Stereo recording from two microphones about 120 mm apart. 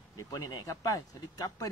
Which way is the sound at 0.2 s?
30° left (ahead or behind).